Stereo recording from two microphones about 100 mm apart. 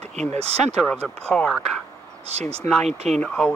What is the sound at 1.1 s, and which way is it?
Speech, 10° left (ahead or behind).